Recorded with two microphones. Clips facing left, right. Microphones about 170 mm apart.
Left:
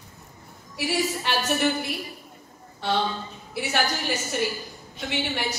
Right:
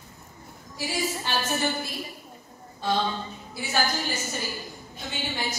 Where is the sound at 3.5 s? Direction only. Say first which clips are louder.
Left 6 dB; 70° left (ahead or behind).